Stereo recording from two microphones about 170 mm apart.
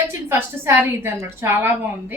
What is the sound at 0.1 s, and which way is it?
A woman's voice, 15° right (ahead or behind).